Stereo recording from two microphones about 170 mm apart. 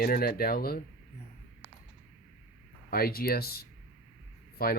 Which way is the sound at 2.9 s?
60° left (ahead or behind).